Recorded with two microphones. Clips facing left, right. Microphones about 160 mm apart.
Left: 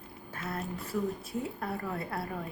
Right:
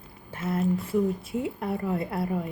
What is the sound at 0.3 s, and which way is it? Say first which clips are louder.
Speech: right 11 dB; 25° right (ahead or behind).